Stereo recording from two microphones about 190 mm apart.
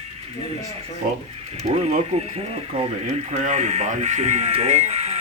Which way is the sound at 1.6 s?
35° right (ahead or behind).